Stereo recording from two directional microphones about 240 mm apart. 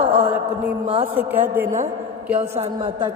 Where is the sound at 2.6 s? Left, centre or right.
Right.